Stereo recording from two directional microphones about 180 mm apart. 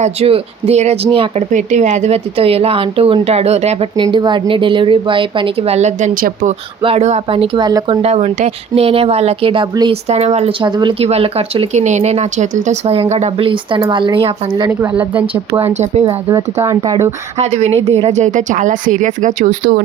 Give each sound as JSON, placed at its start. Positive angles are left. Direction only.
{"t": 0.0, "sound": "a woman's voice", "side_deg": -35}
{"t": 6.8, "sound": "speech", "side_deg": -35}
{"t": 8.0, "sound": "a woman's voice", "side_deg": -35}
{"t": 10.1, "sound": "a woman's voice", "side_deg": -35}
{"t": 15.1, "sound": "speech", "side_deg": -10}
{"t": 17.3, "sound": "a woman's voice", "side_deg": -35}